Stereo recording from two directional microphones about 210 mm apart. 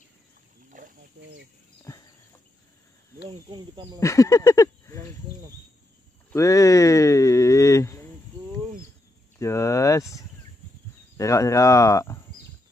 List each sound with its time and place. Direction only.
0.7 s wild animals: 40° right (ahead or behind)
3.3 s speech: 20° right (ahead or behind)
4.0 s speech: 15° left (ahead or behind)
6.3 s speech: 15° left (ahead or behind)
9.4 s cricket: 15° left (ahead or behind)
11.1 s speech: 15° left (ahead or behind)